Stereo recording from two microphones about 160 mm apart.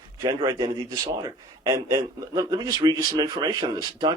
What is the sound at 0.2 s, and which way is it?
A man's voice, 30° right (ahead or behind).